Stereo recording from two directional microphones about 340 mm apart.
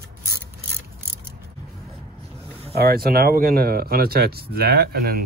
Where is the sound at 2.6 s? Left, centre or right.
Right.